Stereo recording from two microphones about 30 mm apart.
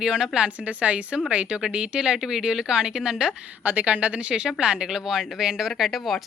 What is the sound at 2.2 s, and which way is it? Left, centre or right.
Speech, centre.